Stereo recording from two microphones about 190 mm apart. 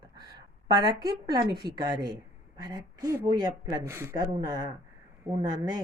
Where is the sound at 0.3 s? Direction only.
20° right (ahead or behind).